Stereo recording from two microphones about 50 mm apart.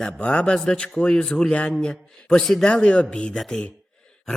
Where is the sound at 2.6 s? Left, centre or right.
Left.